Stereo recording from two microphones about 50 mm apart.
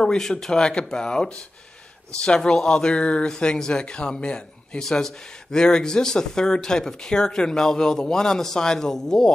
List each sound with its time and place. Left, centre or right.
0.0 s speech: centre